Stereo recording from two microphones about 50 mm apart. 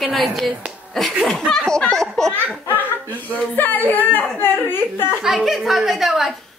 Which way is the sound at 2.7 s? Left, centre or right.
Left.